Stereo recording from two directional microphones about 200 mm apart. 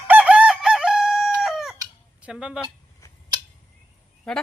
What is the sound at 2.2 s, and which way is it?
Speech, 5° right (ahead or behind).